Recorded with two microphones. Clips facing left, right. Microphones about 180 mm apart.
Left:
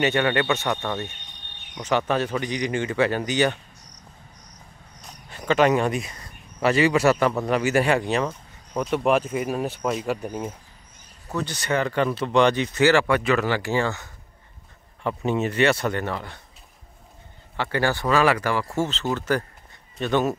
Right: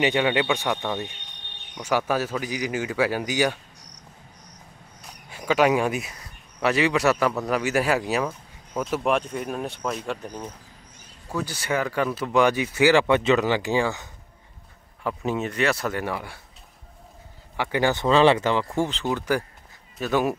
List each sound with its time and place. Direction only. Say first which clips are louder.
0.0 s speech: even; 15° right (ahead or behind)
5.0 s speech: left 1 dB; 10° right (ahead or behind)
11.3 s speech: left 1 dB; 5° right (ahead or behind)
13.1 s speech: right 2 dB; 20° right (ahead or behind)
15.0 s speech: left 2 dB; centre (ahead or behind)
17.6 s speech: right 1 dB; 15° right (ahead or behind)